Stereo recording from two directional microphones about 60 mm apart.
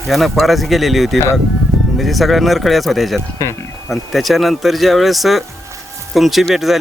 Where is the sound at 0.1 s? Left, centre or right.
Centre.